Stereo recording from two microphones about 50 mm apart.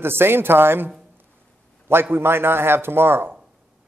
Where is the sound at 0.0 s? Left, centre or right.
Right.